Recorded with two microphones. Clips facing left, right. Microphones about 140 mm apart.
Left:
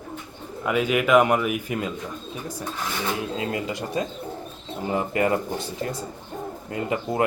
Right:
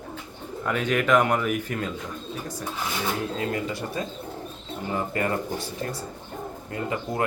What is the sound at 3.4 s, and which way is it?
A man's voice, 20° left (ahead or behind).